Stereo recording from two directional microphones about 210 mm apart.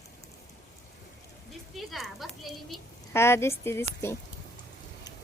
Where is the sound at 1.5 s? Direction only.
Centre (ahead or behind).